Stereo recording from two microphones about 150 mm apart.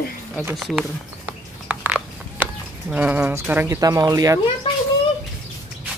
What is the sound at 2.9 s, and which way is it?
Speech, 10° right (ahead or behind).